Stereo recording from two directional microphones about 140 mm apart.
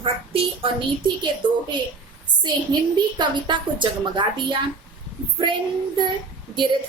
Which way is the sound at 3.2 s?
35° right (ahead or behind).